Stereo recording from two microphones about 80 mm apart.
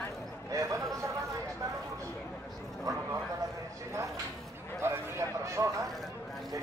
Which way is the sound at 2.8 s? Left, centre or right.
Right.